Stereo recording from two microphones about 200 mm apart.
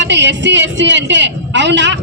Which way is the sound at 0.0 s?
60° right (ahead or behind).